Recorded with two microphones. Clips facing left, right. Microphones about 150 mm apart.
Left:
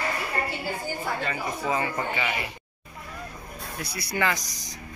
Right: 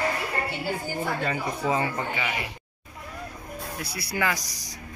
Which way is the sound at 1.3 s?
30° right (ahead or behind).